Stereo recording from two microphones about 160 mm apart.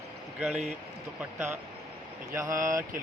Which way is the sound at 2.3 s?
20° right (ahead or behind).